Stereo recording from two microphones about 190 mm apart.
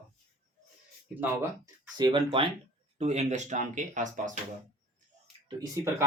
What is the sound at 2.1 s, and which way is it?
Speech, 25° right (ahead or behind).